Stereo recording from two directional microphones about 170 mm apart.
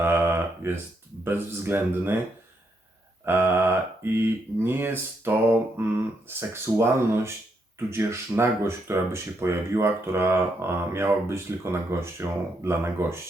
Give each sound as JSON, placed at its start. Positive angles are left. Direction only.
{"t": 0.0, "sound": "a sound", "side_deg": -15}
{"t": 1.2, "sound": "speech", "side_deg": -15}
{"t": 3.2, "sound": "speech", "side_deg": -15}